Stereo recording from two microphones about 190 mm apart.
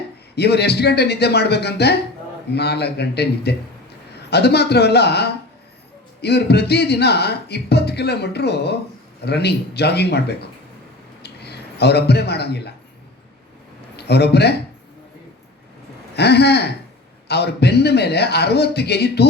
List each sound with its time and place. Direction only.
0.3 s speech: 60° left (ahead or behind)
11.2 s a sound: 60° left (ahead or behind)
13.9 s speech: 60° left (ahead or behind)
16.1 s speech: 60° left (ahead or behind)